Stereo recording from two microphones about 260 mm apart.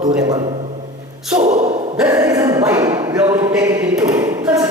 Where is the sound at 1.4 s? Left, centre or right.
Right.